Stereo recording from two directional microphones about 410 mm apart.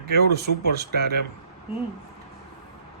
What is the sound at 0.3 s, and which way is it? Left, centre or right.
Speech, right.